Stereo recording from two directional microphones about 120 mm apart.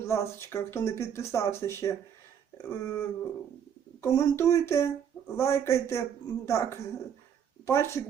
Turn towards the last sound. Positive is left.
turn(degrees=20)  # may be behind; listen again after turning